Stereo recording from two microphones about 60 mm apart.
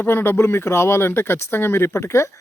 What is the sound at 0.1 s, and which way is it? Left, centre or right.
Speech, left.